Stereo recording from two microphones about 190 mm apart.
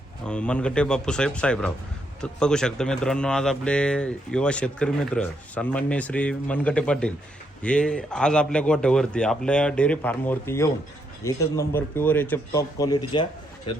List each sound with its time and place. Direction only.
0.3 s speech: 5° left (ahead or behind)